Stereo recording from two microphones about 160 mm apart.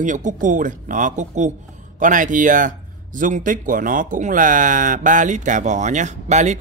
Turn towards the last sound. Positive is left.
turn(degrees=-45)  # may be behind; listen again after turning